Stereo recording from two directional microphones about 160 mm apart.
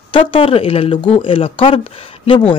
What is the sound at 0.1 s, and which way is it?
Speech, 35° left (ahead or behind).